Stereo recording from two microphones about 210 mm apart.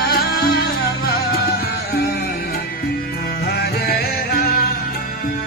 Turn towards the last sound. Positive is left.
turn(degrees=45)  # may be behind; listen again after turning